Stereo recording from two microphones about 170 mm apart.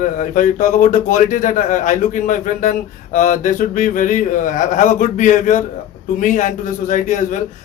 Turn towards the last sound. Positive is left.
turn(degrees=45)  # may be behind; listen again after turning